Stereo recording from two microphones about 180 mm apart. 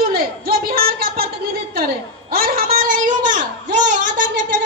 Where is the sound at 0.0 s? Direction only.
55° right (ahead or behind).